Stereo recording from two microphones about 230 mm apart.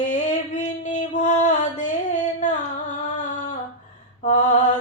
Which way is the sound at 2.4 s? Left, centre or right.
Left.